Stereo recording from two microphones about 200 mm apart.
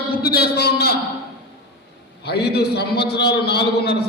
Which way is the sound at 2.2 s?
55° left (ahead or behind).